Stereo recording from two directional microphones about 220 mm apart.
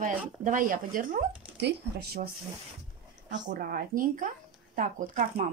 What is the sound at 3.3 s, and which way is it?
Speech, 35° right (ahead or behind).